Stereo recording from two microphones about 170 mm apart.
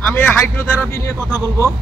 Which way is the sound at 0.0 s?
10° left (ahead or behind).